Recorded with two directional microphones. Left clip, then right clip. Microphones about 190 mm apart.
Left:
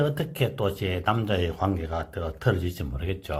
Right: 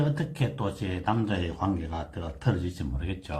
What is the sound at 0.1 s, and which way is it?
Speech, 45° left (ahead or behind).